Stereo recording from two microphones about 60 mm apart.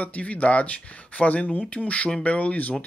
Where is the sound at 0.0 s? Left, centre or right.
Left.